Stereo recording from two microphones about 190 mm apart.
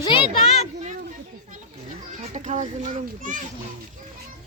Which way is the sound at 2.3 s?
40° right (ahead or behind).